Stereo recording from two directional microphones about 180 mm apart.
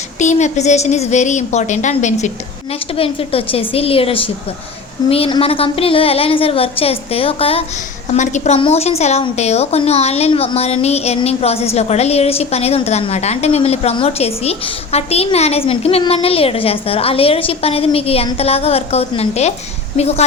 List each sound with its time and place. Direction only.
0.2 s a woman's voice: 40° left (ahead or behind)